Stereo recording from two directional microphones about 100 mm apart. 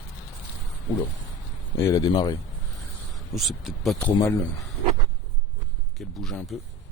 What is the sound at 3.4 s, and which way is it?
Speech, centre (ahead or behind).